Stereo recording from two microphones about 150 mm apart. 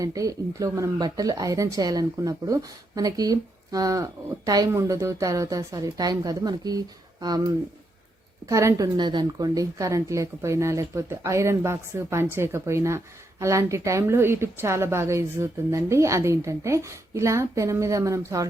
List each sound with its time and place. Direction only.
0.0 s speech: 25° right (ahead or behind)